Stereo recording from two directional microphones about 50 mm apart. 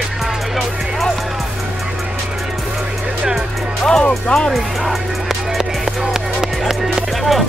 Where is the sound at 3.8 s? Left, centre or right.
Centre.